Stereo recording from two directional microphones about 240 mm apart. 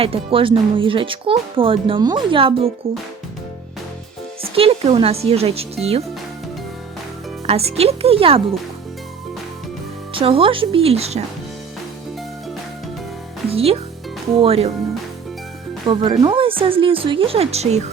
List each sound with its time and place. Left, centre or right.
0.0 s speech: right
4.5 s speech: right
7.4 s speech: right
10.2 s speech: right
13.5 s speech: right
15.9 s speech: centre